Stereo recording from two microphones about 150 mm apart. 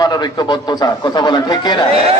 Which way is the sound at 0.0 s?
25° left (ahead or behind).